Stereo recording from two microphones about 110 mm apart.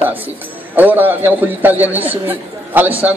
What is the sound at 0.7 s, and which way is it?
A man's voice, 15° right (ahead or behind).